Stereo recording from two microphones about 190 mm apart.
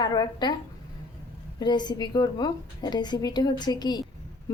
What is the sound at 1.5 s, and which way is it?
A woman's voice, 20° left (ahead or behind).